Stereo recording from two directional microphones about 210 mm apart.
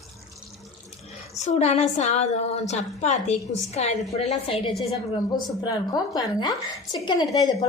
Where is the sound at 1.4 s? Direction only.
30° left (ahead or behind).